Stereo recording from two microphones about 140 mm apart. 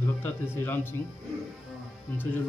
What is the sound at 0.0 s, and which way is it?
Speech, 15° left (ahead or behind).